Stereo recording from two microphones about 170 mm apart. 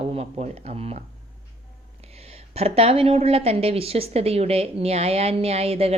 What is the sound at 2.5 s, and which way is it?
A woman's voice, 35° right (ahead or behind).